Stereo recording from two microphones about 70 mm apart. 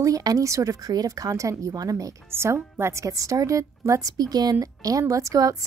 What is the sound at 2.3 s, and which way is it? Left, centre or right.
A woman's voice, right.